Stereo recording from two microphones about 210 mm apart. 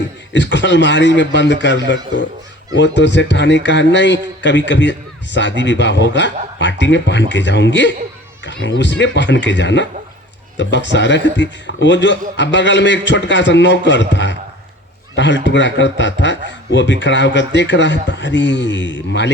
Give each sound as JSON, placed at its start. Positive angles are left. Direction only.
{"t": 0.3, "sound": "a man's voice", "side_deg": 60}